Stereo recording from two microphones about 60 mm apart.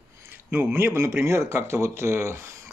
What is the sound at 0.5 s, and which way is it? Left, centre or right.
Speech, right.